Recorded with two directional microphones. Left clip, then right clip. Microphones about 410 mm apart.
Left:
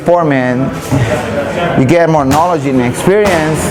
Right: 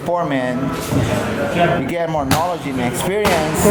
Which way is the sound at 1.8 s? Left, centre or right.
Left.